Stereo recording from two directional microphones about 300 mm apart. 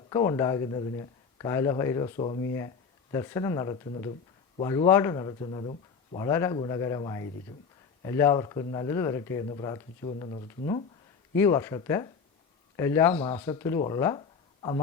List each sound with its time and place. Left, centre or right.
0.1 s speech: centre
11.3 s speech: centre